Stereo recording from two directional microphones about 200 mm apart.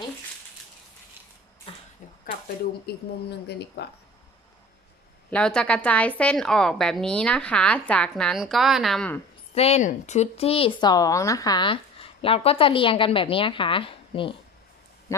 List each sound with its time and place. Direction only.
1.7 s a sound: 25° left (ahead or behind)
2.8 s speech: 55° left (ahead or behind)
5.3 s a woman's voice: 5° left (ahead or behind)
9.6 s speech: 30° left (ahead or behind)